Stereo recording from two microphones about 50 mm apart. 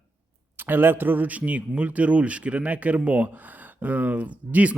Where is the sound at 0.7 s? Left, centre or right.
Right.